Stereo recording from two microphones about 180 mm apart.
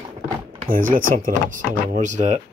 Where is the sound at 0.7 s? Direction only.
50° right (ahead or behind).